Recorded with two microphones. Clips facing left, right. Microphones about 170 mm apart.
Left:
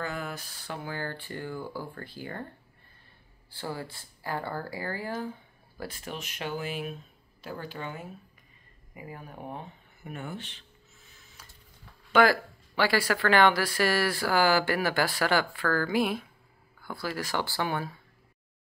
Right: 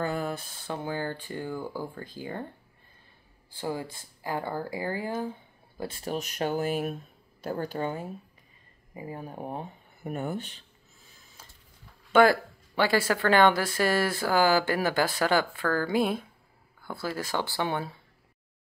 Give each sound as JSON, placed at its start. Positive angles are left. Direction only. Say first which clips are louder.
{"t": 0.0, "sound": "speech", "louder": "right 5 dB", "side_deg": -35}
{"t": 3.5, "sound": "speech", "louder": "right 4 dB", "side_deg": -15}
{"t": 12.8, "sound": "speech", "louder": "right 1 dB", "side_deg": -20}